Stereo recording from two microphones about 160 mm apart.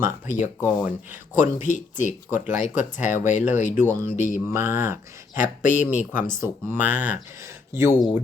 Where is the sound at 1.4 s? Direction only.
50° left (ahead or behind).